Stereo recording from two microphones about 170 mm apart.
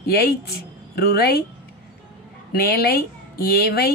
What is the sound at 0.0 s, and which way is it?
Speech, 65° left (ahead or behind).